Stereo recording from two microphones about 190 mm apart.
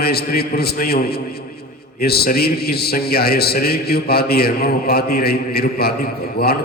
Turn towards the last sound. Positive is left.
turn(degrees=55)  # may be behind; listen again after turning